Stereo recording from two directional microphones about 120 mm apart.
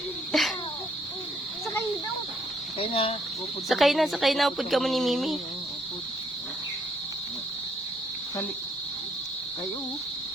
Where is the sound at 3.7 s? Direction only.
Centre (ahead or behind).